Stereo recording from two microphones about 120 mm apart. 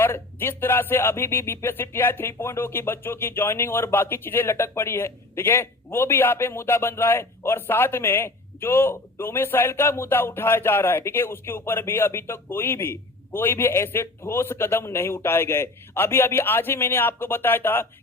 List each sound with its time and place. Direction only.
0.0 s speech: 20° left (ahead or behind)